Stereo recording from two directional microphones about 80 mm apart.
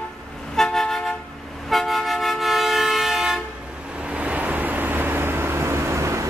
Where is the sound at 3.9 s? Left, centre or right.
Centre.